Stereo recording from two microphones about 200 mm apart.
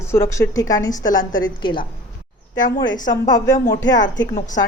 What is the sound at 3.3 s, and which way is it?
Speech, 20° left (ahead or behind).